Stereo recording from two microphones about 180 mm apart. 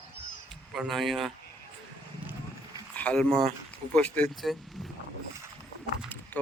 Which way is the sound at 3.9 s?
5° left (ahead or behind).